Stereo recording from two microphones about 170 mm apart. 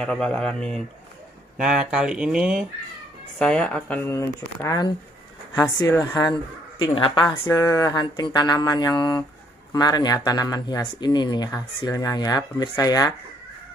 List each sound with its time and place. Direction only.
0.0 s speech: 5° left (ahead or behind)
6.8 s speech: 30° left (ahead or behind)
7.4 s speech: 15° left (ahead or behind)